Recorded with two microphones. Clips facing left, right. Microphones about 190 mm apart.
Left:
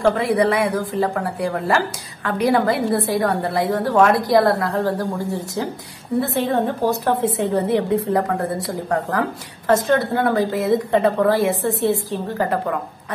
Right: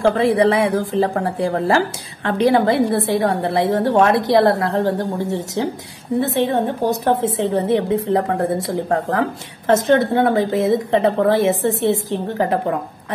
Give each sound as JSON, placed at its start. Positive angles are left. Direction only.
{"t": 0.2, "sound": "a woman's voice", "side_deg": -30}